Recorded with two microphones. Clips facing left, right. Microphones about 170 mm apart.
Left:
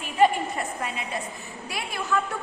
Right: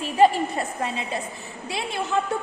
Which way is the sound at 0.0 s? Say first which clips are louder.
Right 3 dB; 30° right (ahead or behind).